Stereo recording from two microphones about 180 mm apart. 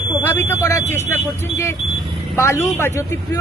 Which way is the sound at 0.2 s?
10° left (ahead or behind).